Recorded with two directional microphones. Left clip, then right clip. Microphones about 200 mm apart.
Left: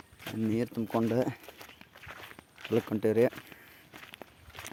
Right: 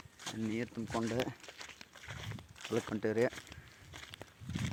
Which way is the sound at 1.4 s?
25° right (ahead or behind).